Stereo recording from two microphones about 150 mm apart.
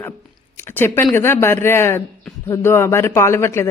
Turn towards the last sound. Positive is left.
turn(degrees=15)  # may be behind; listen again after turning